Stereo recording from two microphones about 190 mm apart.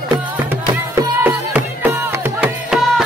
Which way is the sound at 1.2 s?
10° right (ahead or behind).